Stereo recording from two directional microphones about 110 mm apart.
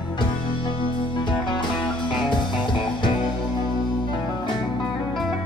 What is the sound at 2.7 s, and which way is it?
Music, 45° left (ahead or behind).